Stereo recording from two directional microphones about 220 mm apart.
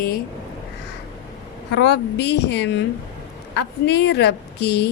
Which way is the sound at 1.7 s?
50° left (ahead or behind).